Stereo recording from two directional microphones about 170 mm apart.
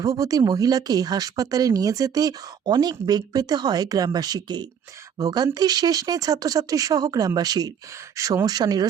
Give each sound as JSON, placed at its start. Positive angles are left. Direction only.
{"t": 0.0, "sound": "speech", "side_deg": -20}